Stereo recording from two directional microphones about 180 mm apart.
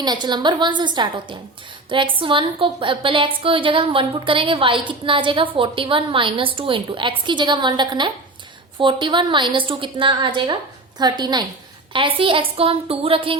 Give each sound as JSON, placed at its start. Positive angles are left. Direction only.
{"t": 0.0, "sound": "a woman's voice", "side_deg": -25}